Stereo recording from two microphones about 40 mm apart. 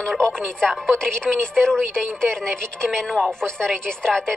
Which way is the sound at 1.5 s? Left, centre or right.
Centre.